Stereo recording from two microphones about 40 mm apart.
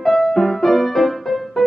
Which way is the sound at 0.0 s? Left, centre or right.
Centre.